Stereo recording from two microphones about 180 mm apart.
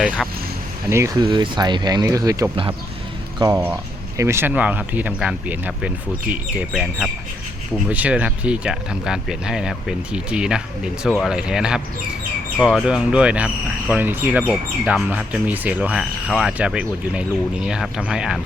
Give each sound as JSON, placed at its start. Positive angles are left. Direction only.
{"t": 0.9, "sound": "speech", "side_deg": -15}